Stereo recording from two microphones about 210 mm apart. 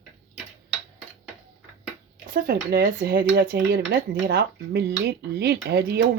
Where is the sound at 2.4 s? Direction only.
50° right (ahead or behind).